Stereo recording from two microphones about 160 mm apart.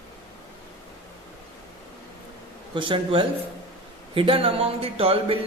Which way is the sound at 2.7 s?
30° right (ahead or behind).